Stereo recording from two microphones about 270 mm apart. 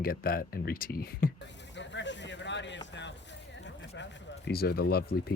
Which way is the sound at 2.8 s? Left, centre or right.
Left.